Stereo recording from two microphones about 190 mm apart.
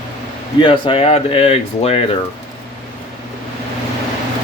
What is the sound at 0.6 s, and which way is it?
Speech, 25° left (ahead or behind).